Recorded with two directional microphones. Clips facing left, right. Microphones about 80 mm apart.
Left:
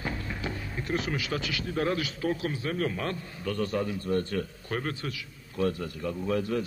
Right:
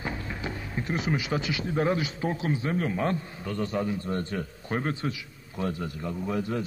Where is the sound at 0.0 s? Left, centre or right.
Centre.